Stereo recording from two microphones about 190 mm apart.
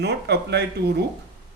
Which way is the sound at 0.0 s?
60° right (ahead or behind).